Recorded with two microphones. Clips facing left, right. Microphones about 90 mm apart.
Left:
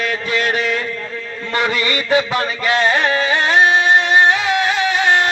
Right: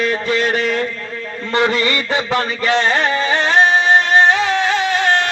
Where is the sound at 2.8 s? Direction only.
5° left (ahead or behind).